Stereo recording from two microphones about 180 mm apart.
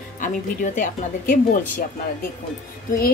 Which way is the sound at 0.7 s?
45° left (ahead or behind).